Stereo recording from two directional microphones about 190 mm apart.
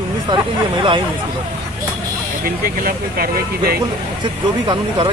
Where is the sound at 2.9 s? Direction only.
50° right (ahead or behind).